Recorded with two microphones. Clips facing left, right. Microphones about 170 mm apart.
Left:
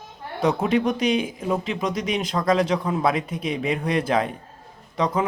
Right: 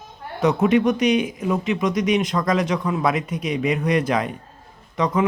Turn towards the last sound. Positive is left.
turn(degrees=30)  # may be behind; listen again after turning